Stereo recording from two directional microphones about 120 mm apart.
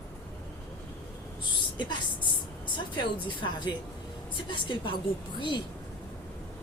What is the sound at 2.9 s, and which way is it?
A woman's voice, 40° left (ahead or behind).